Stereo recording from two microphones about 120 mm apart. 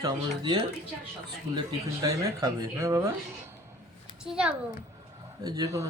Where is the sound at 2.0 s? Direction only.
30° right (ahead or behind).